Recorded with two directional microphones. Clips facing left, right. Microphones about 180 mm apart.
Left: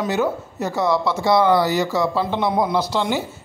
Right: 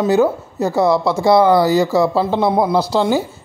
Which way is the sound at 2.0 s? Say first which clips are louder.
Right 5 dB; 30° right (ahead or behind).